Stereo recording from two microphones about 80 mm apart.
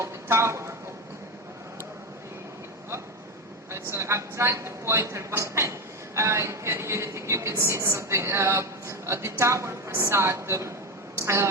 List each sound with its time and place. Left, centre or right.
0.0 s speech: right
3.7 s speech: right